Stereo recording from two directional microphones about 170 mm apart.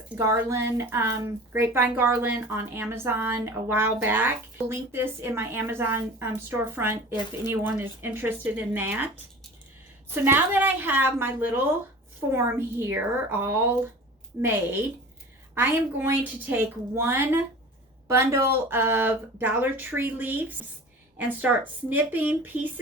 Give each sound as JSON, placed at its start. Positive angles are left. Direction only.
{"t": 0.2, "sound": "a woman's voice", "side_deg": -15}
{"t": 10.2, "sound": "a woman's voice", "side_deg": -10}
{"t": 15.5, "sound": "a woman's voice", "side_deg": -10}